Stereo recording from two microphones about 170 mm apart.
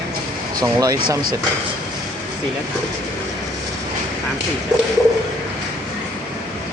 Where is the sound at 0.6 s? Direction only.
20° right (ahead or behind).